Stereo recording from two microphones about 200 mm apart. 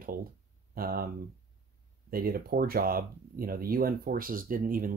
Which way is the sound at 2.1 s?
50° right (ahead or behind).